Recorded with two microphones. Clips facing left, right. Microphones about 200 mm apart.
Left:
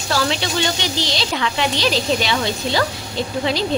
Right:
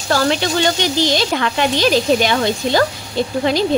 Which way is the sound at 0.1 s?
50° right (ahead or behind).